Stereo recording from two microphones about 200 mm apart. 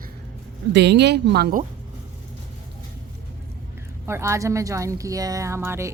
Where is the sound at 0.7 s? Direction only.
60° right (ahead or behind).